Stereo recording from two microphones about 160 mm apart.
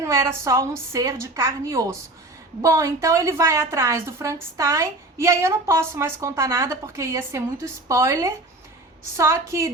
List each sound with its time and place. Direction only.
0.0 s a woman's voice: 15° right (ahead or behind)